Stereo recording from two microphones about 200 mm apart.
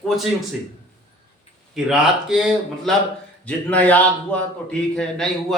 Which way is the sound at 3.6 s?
10° left (ahead or behind).